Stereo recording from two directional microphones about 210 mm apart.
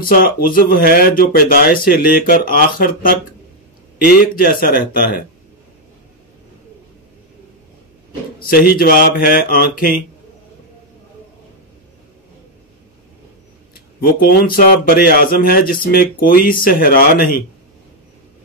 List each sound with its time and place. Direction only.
0.0 s speech: 45° left (ahead or behind)
8.4 s speech: 45° left (ahead or behind)
14.0 s speech: 45° left (ahead or behind)